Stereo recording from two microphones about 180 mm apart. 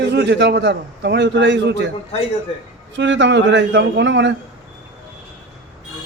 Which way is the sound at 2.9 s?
90° right.